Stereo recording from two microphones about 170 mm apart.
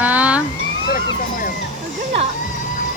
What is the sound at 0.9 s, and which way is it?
Speech, 55° left (ahead or behind).